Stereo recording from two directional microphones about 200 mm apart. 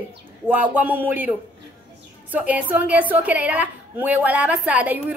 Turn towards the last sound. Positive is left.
turn(degrees=-5)  # may be behind; listen again after turning